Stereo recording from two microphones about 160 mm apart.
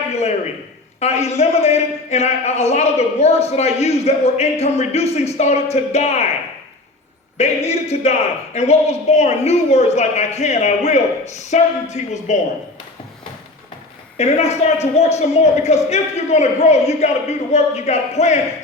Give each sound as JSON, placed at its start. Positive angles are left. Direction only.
{"t": 0.1, "sound": "a sound", "side_deg": 45}
{"t": 0.9, "sound": "a man's voice", "side_deg": 45}
{"t": 7.3, "sound": "a man's voice", "side_deg": 40}
{"t": 14.2, "sound": "a man's voice", "side_deg": 40}